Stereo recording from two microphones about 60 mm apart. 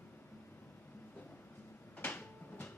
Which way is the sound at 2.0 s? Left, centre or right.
Left.